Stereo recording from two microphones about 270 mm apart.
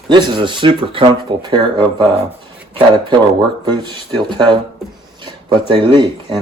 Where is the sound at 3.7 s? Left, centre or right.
Centre.